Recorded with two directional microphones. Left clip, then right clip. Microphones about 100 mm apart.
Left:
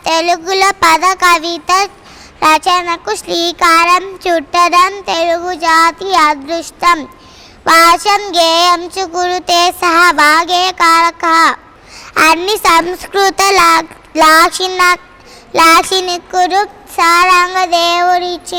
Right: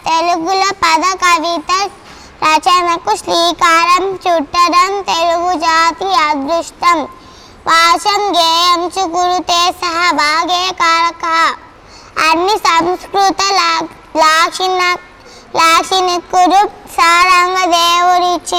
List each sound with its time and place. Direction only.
0.0 s a woman's voice: 25° left (ahead or behind)